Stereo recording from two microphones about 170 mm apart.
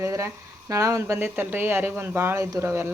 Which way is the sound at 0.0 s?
15° right (ahead or behind).